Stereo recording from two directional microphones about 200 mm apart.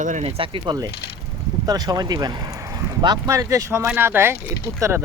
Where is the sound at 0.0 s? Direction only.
35° right (ahead or behind).